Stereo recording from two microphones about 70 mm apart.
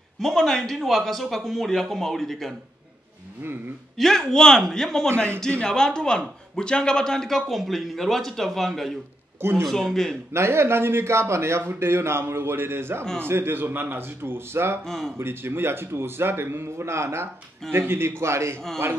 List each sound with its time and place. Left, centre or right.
0.2 s speech: centre
4.0 s speech: centre
5.1 s a man's voice: right
5.6 s speech: centre
10.3 s a man's voice: right
14.9 s speech: centre
15.1 s a man's voice: right